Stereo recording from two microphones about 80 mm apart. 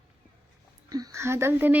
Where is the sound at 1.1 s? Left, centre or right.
Right.